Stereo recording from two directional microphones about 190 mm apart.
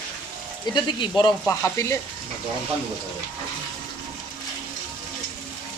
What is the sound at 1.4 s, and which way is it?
Speech, 10° left (ahead or behind).